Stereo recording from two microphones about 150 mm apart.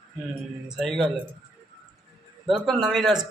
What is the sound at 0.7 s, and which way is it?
Speech, centre (ahead or behind).